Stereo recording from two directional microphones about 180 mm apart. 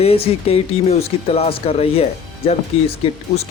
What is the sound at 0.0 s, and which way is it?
Speech, 35° left (ahead or behind).